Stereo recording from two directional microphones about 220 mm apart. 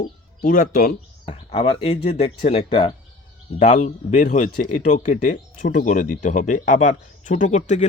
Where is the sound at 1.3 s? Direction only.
25° left (ahead or behind).